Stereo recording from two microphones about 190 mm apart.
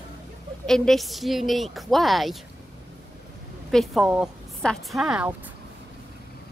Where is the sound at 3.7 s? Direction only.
Centre (ahead or behind).